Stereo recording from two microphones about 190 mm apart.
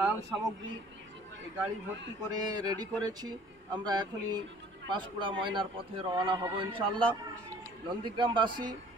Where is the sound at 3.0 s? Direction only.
20° right (ahead or behind).